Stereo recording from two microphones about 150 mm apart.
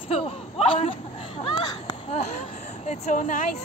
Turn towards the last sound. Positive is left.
turn(degrees=55)  # may be behind; listen again after turning